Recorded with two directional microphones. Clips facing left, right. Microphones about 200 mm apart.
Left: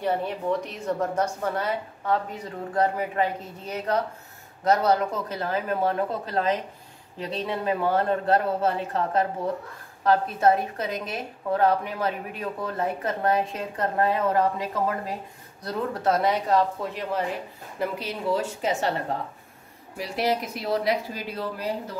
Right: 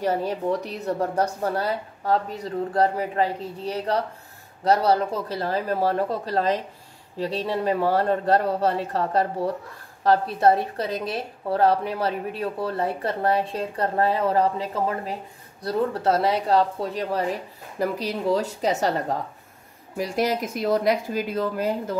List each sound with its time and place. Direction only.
0.0 s a woman's voice: 40° right (ahead or behind)
20.0 s speech: 45° right (ahead or behind)